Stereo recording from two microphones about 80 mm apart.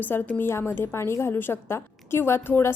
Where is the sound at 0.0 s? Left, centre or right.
Left.